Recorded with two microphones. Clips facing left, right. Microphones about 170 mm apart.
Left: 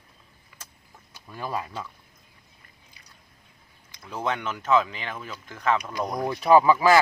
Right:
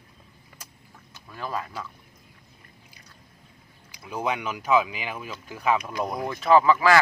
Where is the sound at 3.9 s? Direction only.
10° right (ahead or behind).